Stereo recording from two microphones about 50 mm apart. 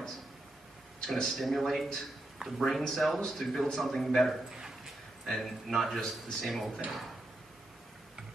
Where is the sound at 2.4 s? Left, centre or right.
Centre.